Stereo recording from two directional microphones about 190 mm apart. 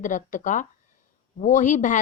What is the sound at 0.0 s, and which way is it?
Speech, 40° left (ahead or behind).